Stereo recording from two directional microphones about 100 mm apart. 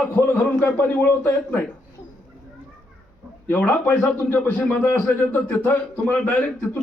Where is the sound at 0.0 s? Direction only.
15° left (ahead or behind).